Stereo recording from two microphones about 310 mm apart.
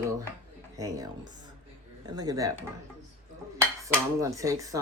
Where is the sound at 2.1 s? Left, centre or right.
Centre.